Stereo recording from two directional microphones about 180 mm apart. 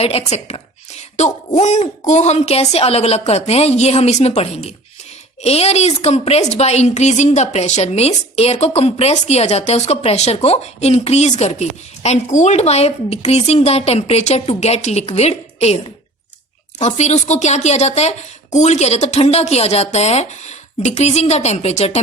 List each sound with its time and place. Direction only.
0.0 s a woman's voice: 35° left (ahead or behind)